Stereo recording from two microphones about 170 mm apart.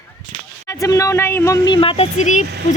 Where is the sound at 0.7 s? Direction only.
20° left (ahead or behind).